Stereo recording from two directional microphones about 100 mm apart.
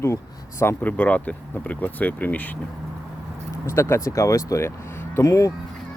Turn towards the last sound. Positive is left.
turn(degrees=35)  # may be behind; listen again after turning